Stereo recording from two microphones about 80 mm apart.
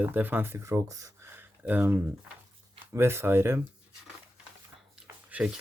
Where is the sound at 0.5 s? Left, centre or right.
Right.